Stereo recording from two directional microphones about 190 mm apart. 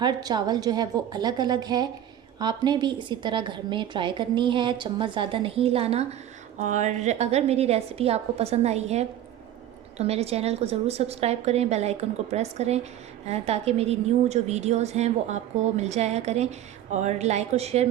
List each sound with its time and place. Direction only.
0.0 s a woman's voice: 20° right (ahead or behind)